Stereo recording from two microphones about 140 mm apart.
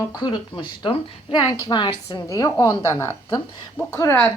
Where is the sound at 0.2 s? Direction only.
35° left (ahead or behind).